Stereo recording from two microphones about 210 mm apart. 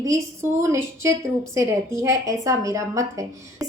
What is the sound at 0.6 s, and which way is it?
A woman's voice, 15° right (ahead or behind).